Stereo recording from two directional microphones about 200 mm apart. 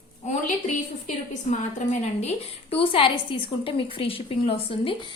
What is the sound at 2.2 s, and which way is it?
A woman's voice, 30° left (ahead or behind).